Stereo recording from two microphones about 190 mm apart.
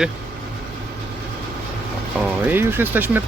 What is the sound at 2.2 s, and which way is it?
Speech, 5° right (ahead or behind).